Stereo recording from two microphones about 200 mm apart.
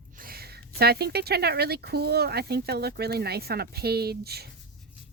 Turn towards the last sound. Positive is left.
turn(degrees=-50)  # may be behind; listen again after turning